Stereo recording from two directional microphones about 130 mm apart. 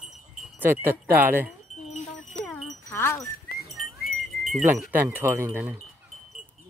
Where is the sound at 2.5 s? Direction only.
20° left (ahead or behind).